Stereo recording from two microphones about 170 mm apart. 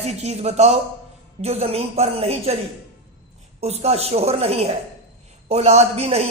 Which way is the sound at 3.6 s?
40° right (ahead or behind).